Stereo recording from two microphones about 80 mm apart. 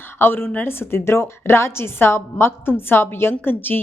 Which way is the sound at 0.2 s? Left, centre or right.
Left.